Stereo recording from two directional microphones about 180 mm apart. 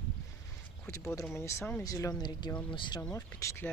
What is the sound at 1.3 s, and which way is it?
Speech, 15° left (ahead or behind).